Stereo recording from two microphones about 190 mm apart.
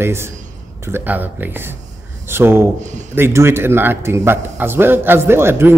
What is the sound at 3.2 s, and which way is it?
Speech, 10° right (ahead or behind).